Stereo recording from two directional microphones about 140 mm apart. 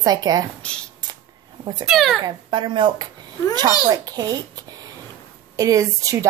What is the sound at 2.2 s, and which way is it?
Speech, 35° right (ahead or behind).